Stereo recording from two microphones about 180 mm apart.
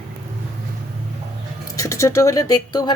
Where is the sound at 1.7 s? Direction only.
15° left (ahead or behind).